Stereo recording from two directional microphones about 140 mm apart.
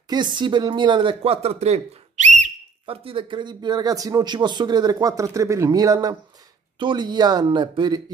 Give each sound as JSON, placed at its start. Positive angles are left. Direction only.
{"t": 0.1, "sound": "a woman's voice", "side_deg": -30}
{"t": 2.9, "sound": "a woman's voice", "side_deg": -40}